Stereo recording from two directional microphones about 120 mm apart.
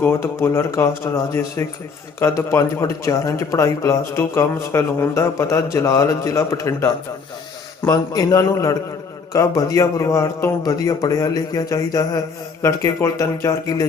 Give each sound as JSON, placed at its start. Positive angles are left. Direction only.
{"t": 0.0, "sound": "speech", "side_deg": 20}